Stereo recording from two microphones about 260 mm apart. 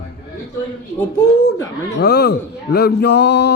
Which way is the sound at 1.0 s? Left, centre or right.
Centre.